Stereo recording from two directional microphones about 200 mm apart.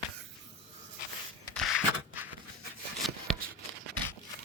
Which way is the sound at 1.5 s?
Centre (ahead or behind).